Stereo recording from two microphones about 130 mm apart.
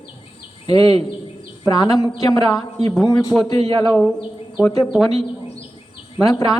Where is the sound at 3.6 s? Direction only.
45° right (ahead or behind).